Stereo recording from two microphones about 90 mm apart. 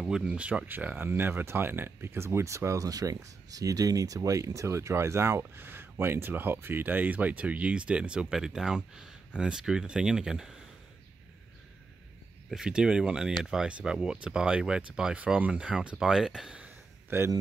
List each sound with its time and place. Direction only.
0.0 s speech: 5° right (ahead or behind)
12.4 s speech: 5° right (ahead or behind)
17.1 s speech: 30° right (ahead or behind)